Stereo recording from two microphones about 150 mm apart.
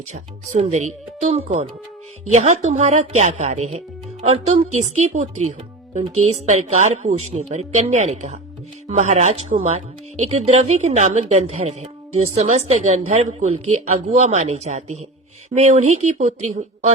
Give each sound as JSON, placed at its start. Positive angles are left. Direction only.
{"t": 0.1, "sound": "speech", "side_deg": -50}